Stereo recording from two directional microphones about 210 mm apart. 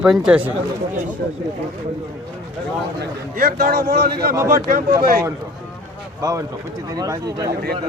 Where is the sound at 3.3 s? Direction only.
45° right (ahead or behind).